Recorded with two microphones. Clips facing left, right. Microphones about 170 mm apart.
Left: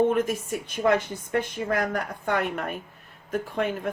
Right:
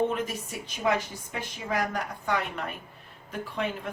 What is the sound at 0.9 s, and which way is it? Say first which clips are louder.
A woman's voice: left 4 dB; 55° left (ahead or behind).